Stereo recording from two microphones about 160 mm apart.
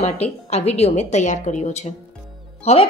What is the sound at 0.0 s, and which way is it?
A woman's voice, 40° left (ahead or behind).